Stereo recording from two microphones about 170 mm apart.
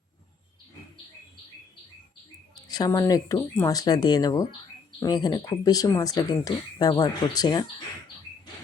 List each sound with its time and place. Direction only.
2.6 s speech: 25° left (ahead or behind)